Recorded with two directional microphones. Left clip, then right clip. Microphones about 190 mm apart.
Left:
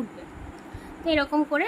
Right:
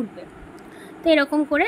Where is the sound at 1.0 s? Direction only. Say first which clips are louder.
Right 5 dB; 20° right (ahead or behind).